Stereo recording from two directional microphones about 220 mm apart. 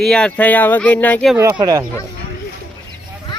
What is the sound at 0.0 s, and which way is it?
Speech, 5° left (ahead or behind).